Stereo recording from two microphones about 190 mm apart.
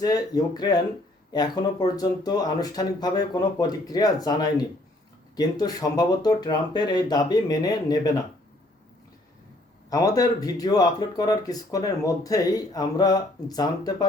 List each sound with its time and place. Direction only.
0.0 s speech: 20° left (ahead or behind)
9.9 s speech: 20° left (ahead or behind)